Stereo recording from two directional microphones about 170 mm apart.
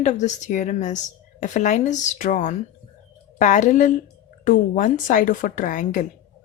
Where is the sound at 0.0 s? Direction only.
45° left (ahead or behind).